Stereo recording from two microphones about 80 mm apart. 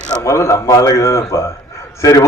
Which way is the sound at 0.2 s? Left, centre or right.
Left.